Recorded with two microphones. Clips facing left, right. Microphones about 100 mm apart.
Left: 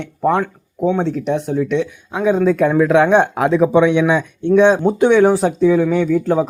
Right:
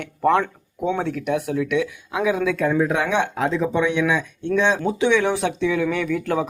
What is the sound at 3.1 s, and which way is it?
Speech, 55° left (ahead or behind).